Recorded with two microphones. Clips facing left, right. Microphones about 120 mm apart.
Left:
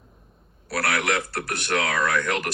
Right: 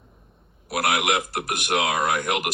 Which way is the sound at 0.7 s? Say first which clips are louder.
Right 2 dB; 15° right (ahead or behind).